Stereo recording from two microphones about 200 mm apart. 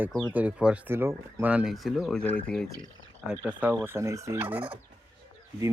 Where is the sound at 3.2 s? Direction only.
10° right (ahead or behind).